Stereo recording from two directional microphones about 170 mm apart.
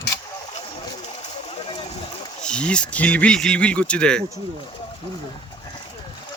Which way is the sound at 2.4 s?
5° left (ahead or behind).